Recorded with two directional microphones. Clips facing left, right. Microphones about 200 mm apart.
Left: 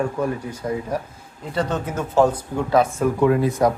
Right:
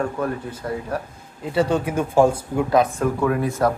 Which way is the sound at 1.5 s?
10° right (ahead or behind).